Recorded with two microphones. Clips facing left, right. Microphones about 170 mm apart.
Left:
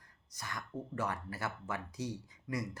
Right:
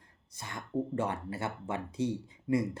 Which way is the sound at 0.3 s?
25° right (ahead or behind).